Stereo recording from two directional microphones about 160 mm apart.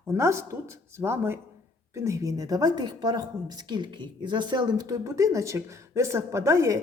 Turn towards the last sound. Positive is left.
turn(degrees=-20)  # may be behind; listen again after turning